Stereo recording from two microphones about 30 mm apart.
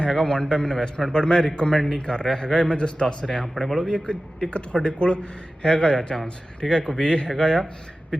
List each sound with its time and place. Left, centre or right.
0.0 s speech: left
3.2 s speech: centre
3.8 s speech: left
7.0 s speech: left